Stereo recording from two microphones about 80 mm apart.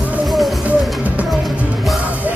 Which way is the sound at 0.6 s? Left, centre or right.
Centre.